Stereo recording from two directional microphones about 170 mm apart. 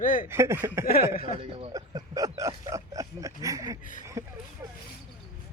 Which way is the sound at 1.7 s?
20° right (ahead or behind).